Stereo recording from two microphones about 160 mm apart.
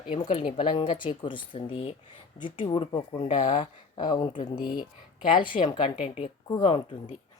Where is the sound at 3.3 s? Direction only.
50° left (ahead or behind).